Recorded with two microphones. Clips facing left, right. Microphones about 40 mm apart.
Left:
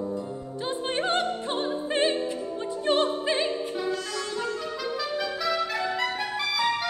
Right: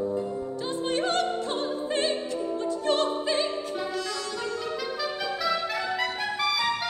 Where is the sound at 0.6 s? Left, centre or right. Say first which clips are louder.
Left 1 dB; left.